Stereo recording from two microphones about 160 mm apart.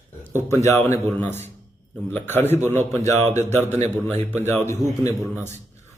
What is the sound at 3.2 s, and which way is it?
Speech, 45° right (ahead or behind).